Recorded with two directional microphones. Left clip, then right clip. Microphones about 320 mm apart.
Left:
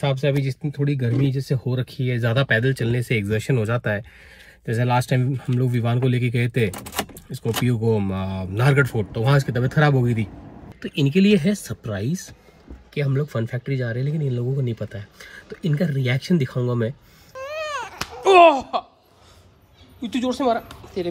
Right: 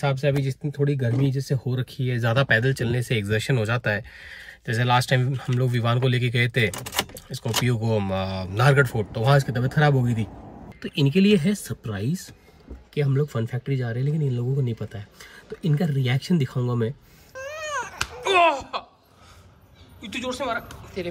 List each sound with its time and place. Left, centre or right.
0.0 s speech: centre
17.5 s baby cry: centre
18.4 s speech: centre
20.1 s speech: centre